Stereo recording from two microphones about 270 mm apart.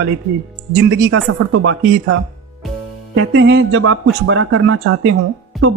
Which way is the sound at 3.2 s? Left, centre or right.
Right.